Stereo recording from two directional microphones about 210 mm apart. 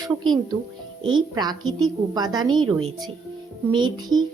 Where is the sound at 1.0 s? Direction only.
20° right (ahead or behind).